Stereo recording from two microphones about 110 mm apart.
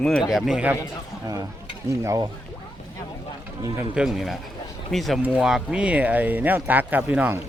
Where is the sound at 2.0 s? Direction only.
30° right (ahead or behind).